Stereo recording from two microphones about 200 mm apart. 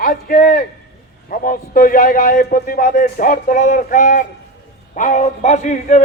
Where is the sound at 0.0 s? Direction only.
45° left (ahead or behind).